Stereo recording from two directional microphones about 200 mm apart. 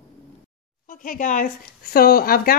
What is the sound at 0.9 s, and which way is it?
Speech, 40° left (ahead or behind).